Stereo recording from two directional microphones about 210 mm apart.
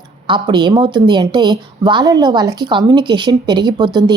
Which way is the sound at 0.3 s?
20° right (ahead or behind).